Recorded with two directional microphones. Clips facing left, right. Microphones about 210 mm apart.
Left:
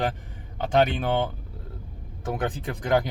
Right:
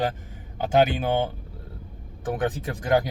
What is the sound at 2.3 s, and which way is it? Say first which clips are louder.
Speech: right 2 dB; centre (ahead or behind).